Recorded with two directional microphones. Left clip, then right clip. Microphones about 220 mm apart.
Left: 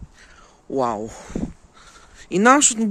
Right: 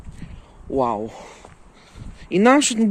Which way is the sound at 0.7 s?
25° left (ahead or behind).